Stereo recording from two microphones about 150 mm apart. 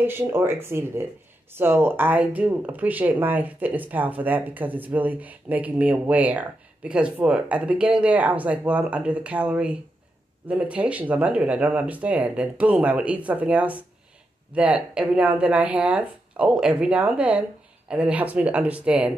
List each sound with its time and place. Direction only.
0.0 s speech: 15° right (ahead or behind)